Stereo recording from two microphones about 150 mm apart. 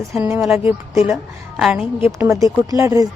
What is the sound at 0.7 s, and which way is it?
Speech, 15° right (ahead or behind).